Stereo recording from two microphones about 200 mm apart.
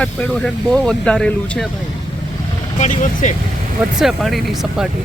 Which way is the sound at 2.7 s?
35° left (ahead or behind).